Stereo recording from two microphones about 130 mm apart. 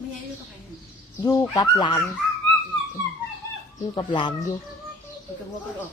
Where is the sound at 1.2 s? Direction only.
25° left (ahead or behind).